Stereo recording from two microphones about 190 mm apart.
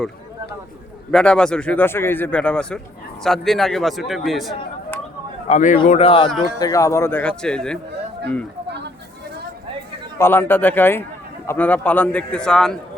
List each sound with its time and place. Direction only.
1.1 s speech: 5° left (ahead or behind)
5.5 s a man's voice: 40° left (ahead or behind)
6.0 s speech: 30° left (ahead or behind)
6.6 s speech: 20° left (ahead or behind)
10.2 s speech: 10° left (ahead or behind)